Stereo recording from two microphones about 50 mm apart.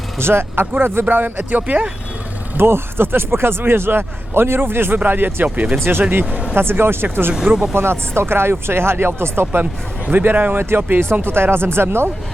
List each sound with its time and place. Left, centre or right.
0.2 s speech: right
2.6 s speech: right
7.4 s speech: centre
7.7 s speech: right
10.1 s speech: right